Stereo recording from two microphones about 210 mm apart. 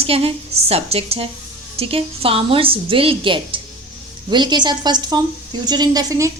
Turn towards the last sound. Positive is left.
turn(degrees=-15)  # may be behind; listen again after turning